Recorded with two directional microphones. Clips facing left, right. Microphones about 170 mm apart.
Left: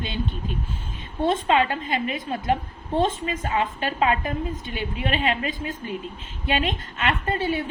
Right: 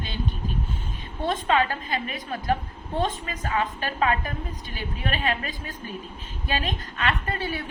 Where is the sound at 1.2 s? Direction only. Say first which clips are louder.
Left 3 dB; 25° left (ahead or behind).